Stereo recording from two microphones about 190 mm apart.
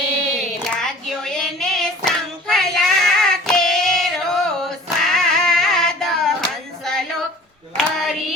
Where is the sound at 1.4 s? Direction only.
Centre (ahead or behind).